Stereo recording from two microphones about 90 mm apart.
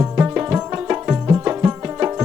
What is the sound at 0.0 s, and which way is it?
Tabla, 20° right (ahead or behind).